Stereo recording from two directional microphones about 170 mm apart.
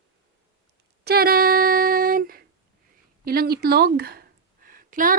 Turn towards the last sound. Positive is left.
turn(degrees=-55)  # may be behind; listen again after turning